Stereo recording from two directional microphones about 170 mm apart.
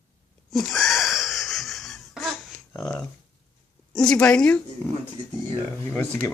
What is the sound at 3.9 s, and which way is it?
Speech, 5° left (ahead or behind).